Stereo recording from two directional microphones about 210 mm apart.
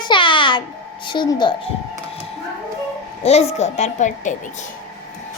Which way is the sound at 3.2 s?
30° left (ahead or behind).